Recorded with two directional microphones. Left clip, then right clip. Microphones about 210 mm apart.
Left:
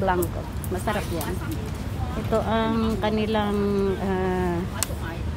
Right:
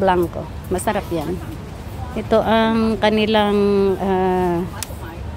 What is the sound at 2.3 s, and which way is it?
Speech, 55° right (ahead or behind).